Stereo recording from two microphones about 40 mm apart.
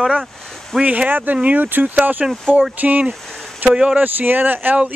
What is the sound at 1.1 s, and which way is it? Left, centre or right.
Speech, right.